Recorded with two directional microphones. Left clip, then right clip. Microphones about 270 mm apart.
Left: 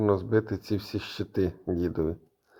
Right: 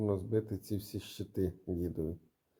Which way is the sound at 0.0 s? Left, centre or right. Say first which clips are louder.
Left 9 dB; centre.